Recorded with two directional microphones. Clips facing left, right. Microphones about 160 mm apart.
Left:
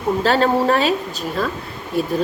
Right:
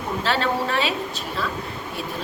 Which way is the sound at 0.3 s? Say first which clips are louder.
Left 7 dB; 40° left (ahead or behind).